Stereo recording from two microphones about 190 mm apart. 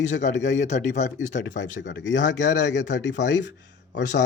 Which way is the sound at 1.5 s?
70° left (ahead or behind).